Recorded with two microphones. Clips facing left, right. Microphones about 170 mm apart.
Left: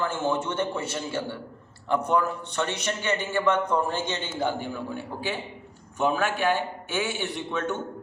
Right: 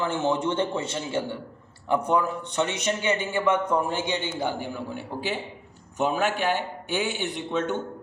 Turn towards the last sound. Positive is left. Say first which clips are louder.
# right 2 dB
turn(degrees=-20)  # may be behind; listen again after turning